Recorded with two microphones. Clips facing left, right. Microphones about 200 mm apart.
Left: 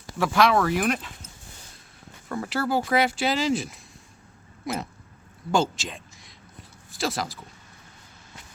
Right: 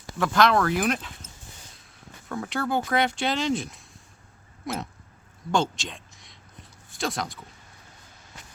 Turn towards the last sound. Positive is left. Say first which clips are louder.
# left 1 dB
turn(degrees=0)  # may be behind; listen again after turning